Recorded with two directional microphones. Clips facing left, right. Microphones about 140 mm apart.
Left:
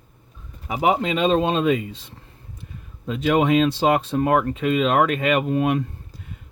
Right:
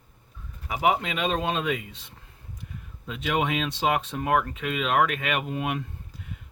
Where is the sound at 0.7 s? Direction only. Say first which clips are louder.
Left 4 dB; 30° left (ahead or behind).